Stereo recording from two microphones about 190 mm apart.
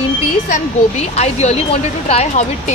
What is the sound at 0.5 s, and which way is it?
A woman's voice, 35° left (ahead or behind).